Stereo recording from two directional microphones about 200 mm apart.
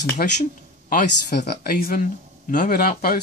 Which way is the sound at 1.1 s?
55° left (ahead or behind).